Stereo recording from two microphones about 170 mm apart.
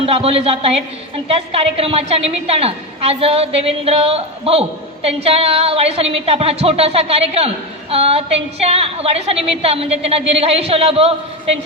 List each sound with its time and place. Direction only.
0.0 s a woman's voice: 35° right (ahead or behind)